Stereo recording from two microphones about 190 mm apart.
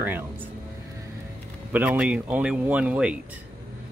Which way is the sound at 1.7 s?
10° right (ahead or behind).